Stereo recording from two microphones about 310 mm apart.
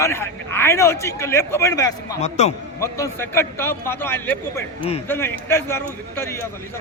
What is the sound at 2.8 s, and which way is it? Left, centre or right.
A man's voice, centre.